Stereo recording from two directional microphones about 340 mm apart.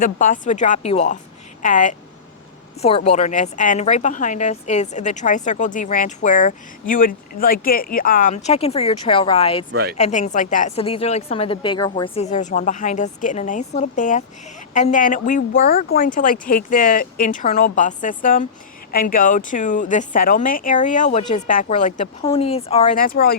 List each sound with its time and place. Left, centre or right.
0.0 s speech: left